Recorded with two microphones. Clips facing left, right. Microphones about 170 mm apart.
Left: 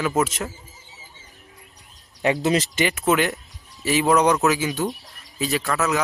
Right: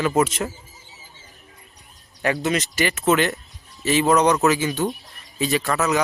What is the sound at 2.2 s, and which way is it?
Speech, 25° left (ahead or behind).